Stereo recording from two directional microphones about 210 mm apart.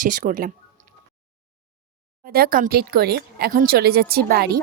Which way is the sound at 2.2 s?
45° right (ahead or behind).